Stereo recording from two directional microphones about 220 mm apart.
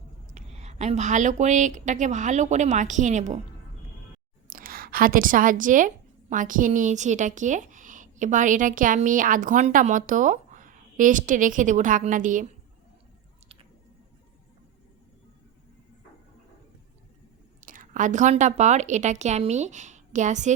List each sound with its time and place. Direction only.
0.3 s a woman's voice: 30° right (ahead or behind)
4.4 s a woman's voice: 40° right (ahead or behind)
17.6 s a woman's voice: 35° right (ahead or behind)